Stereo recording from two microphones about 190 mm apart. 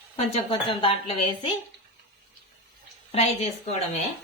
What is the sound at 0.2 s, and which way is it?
A woman's voice, 30° left (ahead or behind).